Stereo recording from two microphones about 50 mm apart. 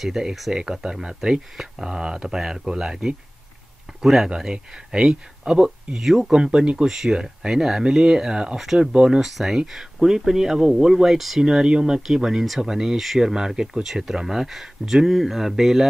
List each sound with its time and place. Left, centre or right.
0.0 s speech: centre
9.2 s speech: centre